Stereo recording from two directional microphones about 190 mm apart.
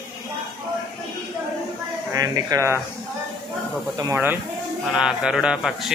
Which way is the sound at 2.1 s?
20° right (ahead or behind).